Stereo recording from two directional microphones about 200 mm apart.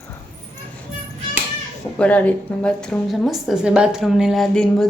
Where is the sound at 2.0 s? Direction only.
5° left (ahead or behind).